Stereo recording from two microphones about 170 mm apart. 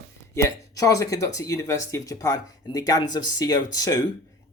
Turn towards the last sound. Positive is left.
turn(degrees=20)  # may be behind; listen again after turning